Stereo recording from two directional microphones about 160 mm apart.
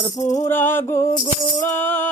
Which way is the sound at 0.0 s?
20° left (ahead or behind).